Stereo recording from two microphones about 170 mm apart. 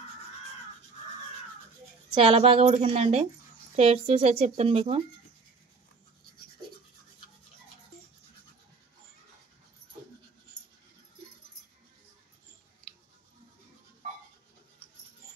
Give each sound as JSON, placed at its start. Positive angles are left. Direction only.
{"t": 2.0, "sound": "speech", "side_deg": -35}